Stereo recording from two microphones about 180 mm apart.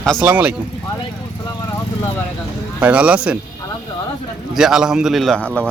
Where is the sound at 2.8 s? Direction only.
5° right (ahead or behind).